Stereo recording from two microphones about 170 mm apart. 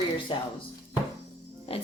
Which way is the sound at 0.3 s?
30° left (ahead or behind).